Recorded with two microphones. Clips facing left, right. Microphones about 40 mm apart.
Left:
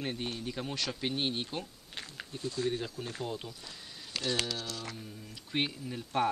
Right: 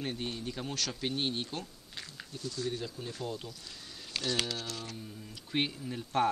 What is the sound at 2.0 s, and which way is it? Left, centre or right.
Speech, left.